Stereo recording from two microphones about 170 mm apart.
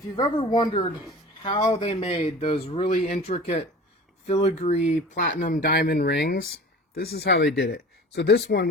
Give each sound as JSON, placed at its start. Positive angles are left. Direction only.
{"t": 0.2, "sound": "speech", "side_deg": 25}